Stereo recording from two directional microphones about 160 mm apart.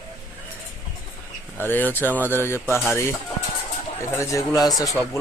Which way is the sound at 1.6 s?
10° left (ahead or behind).